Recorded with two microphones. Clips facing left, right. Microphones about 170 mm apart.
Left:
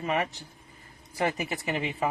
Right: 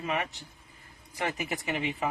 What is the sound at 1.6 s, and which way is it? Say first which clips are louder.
Speech: left 3 dB; 35° left (ahead or behind).